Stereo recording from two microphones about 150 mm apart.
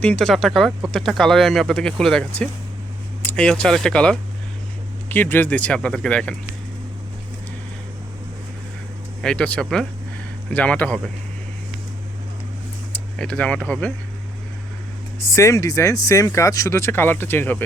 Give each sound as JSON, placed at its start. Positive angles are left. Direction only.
{"t": 0.0, "sound": "speech", "side_deg": 5}
{"t": 3.2, "sound": "speech", "side_deg": 5}
{"t": 9.2, "sound": "speech", "side_deg": 5}
{"t": 13.1, "sound": "speech", "side_deg": 5}
{"t": 15.2, "sound": "speech", "side_deg": 20}